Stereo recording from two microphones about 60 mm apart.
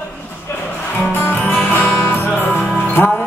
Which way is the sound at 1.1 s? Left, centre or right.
Left.